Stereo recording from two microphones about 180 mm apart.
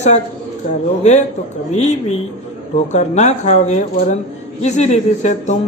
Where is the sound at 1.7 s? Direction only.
35° left (ahead or behind).